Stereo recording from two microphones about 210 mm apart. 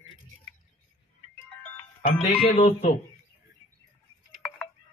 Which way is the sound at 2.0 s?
30° left (ahead or behind).